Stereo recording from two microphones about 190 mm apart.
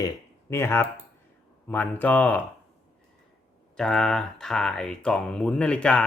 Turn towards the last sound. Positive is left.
turn(degrees=5)  # may be behind; listen again after turning